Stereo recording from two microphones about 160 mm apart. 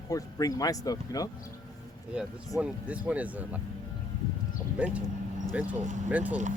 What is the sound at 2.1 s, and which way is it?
Speech, 5° right (ahead or behind).